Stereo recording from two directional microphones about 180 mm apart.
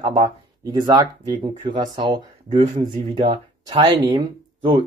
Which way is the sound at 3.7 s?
20° right (ahead or behind).